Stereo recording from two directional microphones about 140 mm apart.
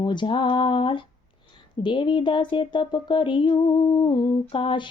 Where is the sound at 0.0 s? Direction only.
35° left (ahead or behind).